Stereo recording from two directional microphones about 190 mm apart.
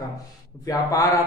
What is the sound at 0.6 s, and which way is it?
Speech, 20° left (ahead or behind).